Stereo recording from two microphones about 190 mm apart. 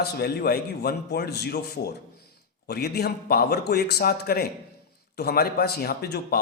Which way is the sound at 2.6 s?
55° left (ahead or behind).